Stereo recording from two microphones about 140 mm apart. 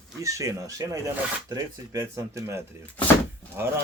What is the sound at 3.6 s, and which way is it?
Speech, 15° right (ahead or behind).